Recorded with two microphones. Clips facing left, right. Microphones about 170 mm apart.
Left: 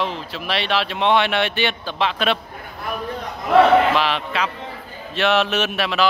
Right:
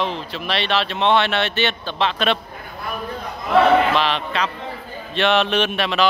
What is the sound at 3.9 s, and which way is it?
Speech, 10° left (ahead or behind).